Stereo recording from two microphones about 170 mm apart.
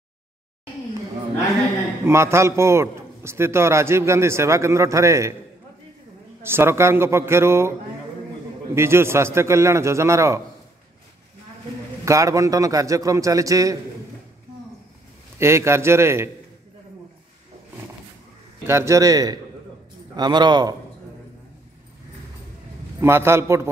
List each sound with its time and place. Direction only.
2.0 s a man's voice: 15° right (ahead or behind)
6.4 s a man's voice: 15° right (ahead or behind)
8.7 s a man's voice: 15° right (ahead or behind)
12.0 s a man's voice: 20° right (ahead or behind)
15.3 s a man's voice: 15° right (ahead or behind)
18.7 s a man's voice: 15° right (ahead or behind)
22.9 s a man's voice: 15° right (ahead or behind)